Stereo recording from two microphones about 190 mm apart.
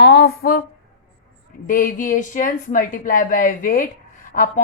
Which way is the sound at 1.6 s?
45° left (ahead or behind).